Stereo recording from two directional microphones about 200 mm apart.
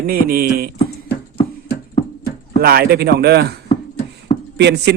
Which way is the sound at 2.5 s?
50° right (ahead or behind).